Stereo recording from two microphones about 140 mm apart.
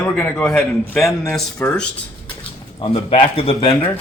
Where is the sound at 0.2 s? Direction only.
10° left (ahead or behind).